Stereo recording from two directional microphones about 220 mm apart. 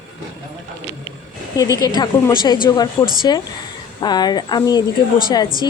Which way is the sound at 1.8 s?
20° left (ahead or behind).